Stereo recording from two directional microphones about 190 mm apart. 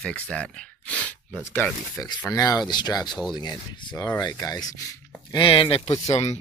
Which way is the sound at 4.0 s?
10° left (ahead or behind).